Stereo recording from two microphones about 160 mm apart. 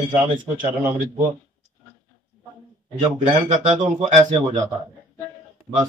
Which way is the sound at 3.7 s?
45° right (ahead or behind).